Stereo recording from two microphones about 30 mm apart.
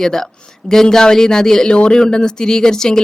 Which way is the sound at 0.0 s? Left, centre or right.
Centre.